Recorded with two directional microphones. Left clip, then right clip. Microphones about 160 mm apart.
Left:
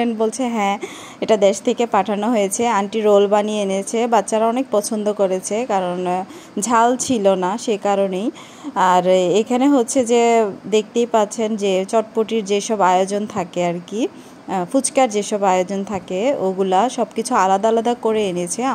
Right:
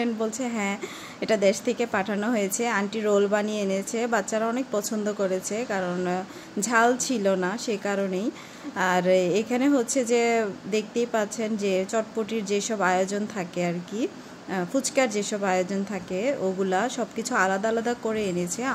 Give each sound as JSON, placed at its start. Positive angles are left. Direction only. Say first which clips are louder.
{"t": 0.0, "sound": "speech", "louder": "left 8 dB", "side_deg": 35}